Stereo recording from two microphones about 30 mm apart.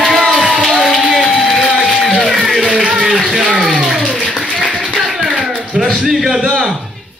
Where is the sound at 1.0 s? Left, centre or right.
Centre.